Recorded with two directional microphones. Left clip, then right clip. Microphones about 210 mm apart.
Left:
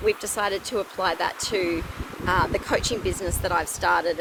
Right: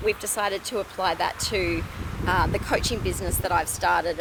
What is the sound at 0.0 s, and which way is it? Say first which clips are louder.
Speech: left 1 dB; 15° right (ahead or behind).